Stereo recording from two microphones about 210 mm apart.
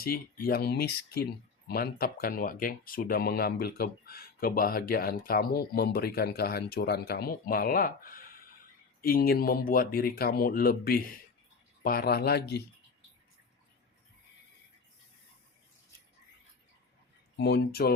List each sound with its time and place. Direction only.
0.0 s speech: 45° left (ahead or behind)
17.3 s speech: 50° left (ahead or behind)